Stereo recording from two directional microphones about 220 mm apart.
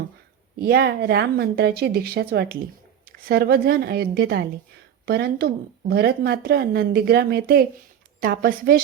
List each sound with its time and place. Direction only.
0.6 s speech: 45° right (ahead or behind)